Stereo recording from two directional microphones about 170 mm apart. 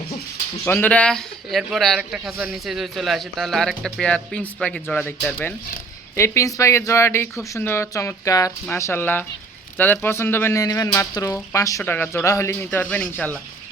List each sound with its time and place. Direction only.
0.6 s a man's voice: 10° left (ahead or behind)